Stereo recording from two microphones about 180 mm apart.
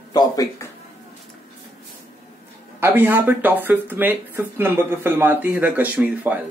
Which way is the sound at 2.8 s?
10° right (ahead or behind).